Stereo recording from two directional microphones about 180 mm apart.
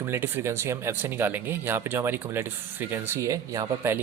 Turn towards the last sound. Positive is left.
turn(degrees=-15)  # may be behind; listen again after turning